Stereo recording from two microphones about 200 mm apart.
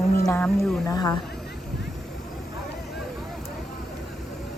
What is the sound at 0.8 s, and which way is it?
Speech, 15° left (ahead or behind).